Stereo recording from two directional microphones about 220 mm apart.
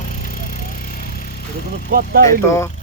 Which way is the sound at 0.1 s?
40° left (ahead or behind).